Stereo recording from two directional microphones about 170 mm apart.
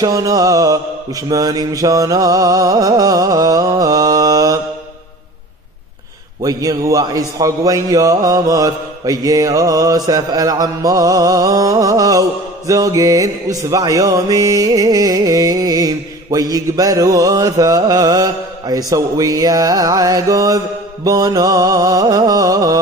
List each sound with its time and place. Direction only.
0.0 s music: 20° right (ahead or behind)
6.4 s music: 20° right (ahead or behind)